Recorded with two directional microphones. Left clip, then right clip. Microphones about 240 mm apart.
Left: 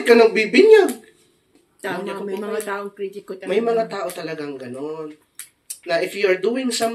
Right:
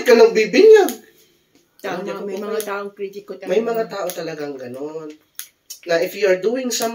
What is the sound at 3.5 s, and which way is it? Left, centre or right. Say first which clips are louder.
Speech: even; left.